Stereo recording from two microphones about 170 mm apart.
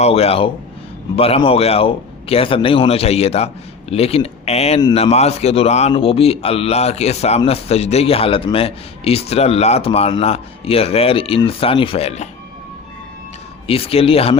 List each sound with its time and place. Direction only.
0.0 s speech: 35° left (ahead or behind)
13.7 s speech: 35° left (ahead or behind)